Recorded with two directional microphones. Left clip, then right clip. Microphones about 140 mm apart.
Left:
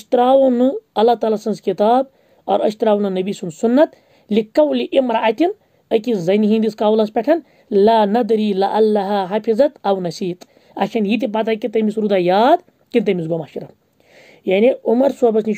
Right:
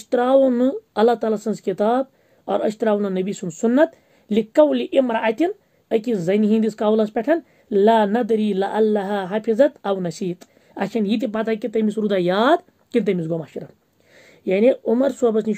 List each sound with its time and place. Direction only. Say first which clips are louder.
0.0 s a woman's voice: left 4 dB; 25° left (ahead or behind)